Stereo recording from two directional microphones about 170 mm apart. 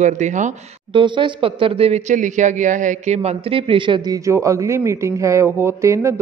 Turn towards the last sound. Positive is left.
turn(degrees=-15)  # may be behind; listen again after turning